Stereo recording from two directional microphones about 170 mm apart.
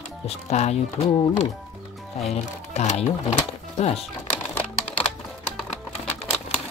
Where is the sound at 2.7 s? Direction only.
40° left (ahead or behind).